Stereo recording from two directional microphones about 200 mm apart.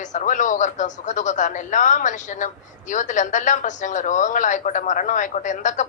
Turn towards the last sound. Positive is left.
turn(degrees=40)  # may be behind; listen again after turning